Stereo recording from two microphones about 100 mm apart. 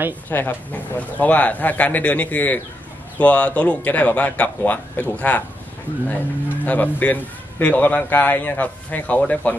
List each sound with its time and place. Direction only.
0.3 s a man's voice: 20° left (ahead or behind)